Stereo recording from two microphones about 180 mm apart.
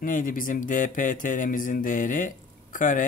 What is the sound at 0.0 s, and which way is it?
Speech, 50° left (ahead or behind).